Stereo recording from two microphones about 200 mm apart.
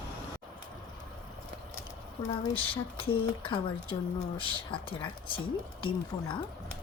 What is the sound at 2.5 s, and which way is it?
Speech, 25° left (ahead or behind).